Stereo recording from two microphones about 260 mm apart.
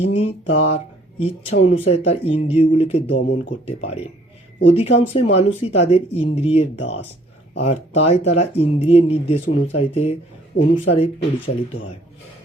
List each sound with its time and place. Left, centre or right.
0.0 s speech: left